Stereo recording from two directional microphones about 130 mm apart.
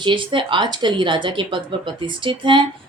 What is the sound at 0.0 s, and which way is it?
Speech, 40° right (ahead or behind).